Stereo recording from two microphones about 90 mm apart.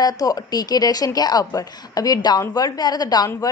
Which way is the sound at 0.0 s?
45° left (ahead or behind).